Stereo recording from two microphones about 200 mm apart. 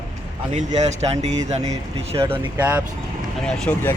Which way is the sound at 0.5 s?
35° right (ahead or behind).